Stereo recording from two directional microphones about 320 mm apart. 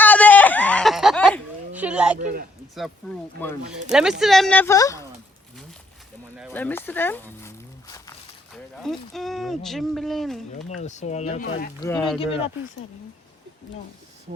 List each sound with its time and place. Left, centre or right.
0.0 s goat: centre
2.1 s a man's voice: right
3.4 s speech: centre
6.3 s speech: centre
10.8 s speech: left
11.8 s speech: centre
12.2 s speech: centre